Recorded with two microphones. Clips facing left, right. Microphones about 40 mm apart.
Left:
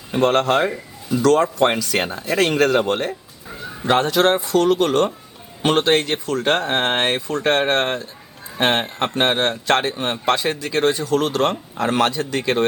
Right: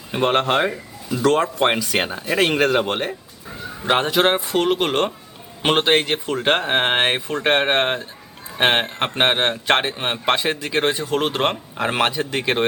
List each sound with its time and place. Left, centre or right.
0.1 s a man's voice: centre